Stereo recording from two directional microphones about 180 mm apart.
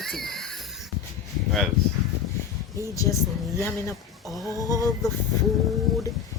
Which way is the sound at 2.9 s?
20° left (ahead or behind).